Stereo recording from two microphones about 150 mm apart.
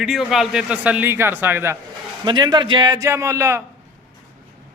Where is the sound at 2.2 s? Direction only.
30° right (ahead or behind).